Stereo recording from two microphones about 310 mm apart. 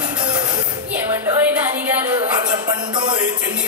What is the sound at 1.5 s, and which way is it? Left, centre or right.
Music, centre.